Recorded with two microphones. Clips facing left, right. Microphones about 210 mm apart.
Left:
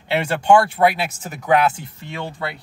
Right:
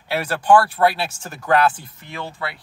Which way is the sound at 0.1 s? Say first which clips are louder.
Left 1 dB; 25° left (ahead or behind).